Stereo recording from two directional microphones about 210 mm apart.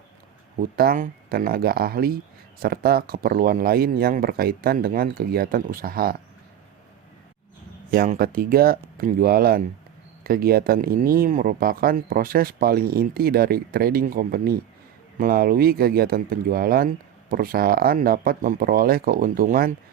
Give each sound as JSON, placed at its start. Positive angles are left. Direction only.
{"t": 0.6, "sound": "speech", "side_deg": -45}
{"t": 7.9, "sound": "speech", "side_deg": -40}